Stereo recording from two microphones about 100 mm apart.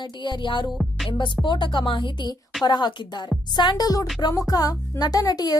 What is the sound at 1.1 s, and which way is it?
A woman's voice, 50° left (ahead or behind).